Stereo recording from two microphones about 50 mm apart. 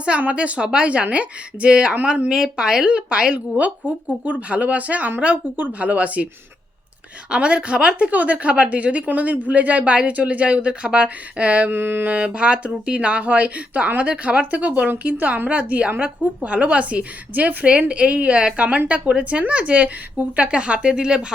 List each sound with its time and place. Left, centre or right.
0.2 s a woman's voice: right
7.3 s a woman's voice: right
11.7 s mantra: right
12.0 s a woman's voice: right